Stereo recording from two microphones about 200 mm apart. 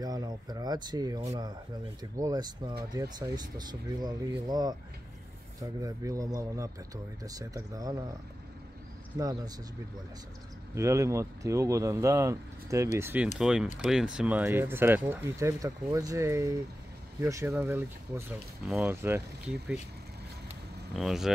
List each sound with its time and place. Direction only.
0.0 s speech: 20° right (ahead or behind)
9.2 s speech: 20° right (ahead or behind)
10.7 s speech: 15° right (ahead or behind)
20.9 s speech: centre (ahead or behind)